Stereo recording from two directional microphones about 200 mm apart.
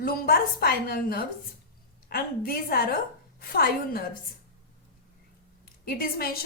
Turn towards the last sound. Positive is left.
turn(degrees=50)  # may be behind; listen again after turning